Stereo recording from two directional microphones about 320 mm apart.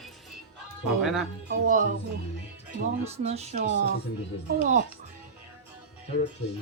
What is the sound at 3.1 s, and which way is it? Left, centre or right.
Speech, centre.